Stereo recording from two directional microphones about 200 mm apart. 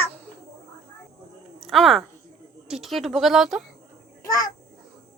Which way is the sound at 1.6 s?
Centre (ahead or behind).